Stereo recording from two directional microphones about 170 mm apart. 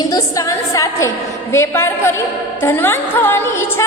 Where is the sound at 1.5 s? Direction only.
15° left (ahead or behind).